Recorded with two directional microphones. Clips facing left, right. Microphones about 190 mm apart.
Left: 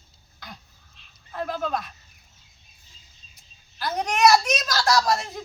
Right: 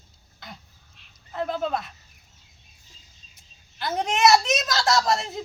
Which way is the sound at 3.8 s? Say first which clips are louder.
Left 1 dB; 25° right (ahead or behind).